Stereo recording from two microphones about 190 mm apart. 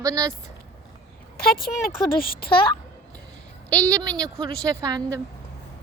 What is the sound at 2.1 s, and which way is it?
Speech, 50° left (ahead or behind).